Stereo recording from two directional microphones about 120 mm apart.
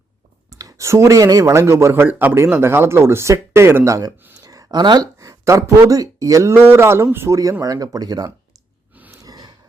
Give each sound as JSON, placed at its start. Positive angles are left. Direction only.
{"t": 0.5, "sound": "speech", "side_deg": -30}
{"t": 8.9, "sound": "a sound", "side_deg": -15}
{"t": 9.1, "sound": "gasp", "side_deg": -30}